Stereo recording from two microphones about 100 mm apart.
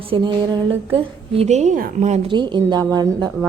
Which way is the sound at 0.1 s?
60° right (ahead or behind).